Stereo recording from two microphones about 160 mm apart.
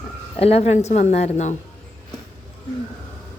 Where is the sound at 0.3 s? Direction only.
40° left (ahead or behind).